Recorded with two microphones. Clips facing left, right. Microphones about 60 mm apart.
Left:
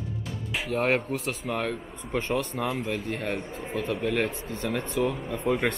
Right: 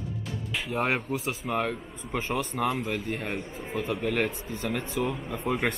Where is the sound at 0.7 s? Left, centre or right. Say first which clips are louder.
Left 3 dB; centre.